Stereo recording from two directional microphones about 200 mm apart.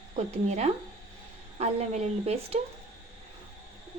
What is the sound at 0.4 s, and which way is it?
A woman's voice, 35° right (ahead or behind).